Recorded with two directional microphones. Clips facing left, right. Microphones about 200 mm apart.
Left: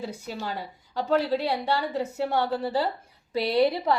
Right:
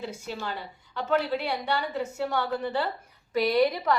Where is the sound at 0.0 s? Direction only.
35° left (ahead or behind).